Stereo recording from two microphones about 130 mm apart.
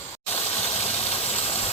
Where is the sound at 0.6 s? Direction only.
55° left (ahead or behind).